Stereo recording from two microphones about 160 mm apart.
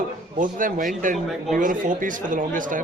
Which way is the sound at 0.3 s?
55° right (ahead or behind).